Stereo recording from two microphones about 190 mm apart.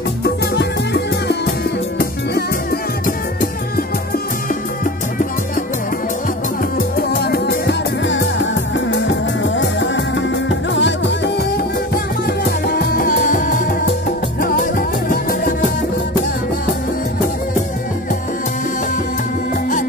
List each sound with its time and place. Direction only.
0.2 s music: 60° left (ahead or behind)
7.0 s music: 55° left (ahead or behind)